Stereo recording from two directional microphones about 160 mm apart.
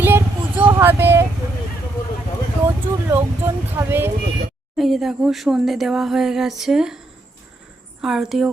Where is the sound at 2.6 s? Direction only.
15° right (ahead or behind).